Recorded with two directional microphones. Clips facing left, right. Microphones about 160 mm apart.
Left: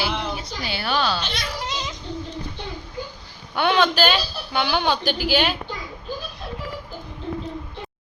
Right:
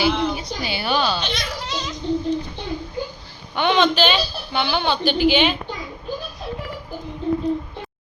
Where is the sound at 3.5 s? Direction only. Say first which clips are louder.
Right 1 dB; 10° left (ahead or behind).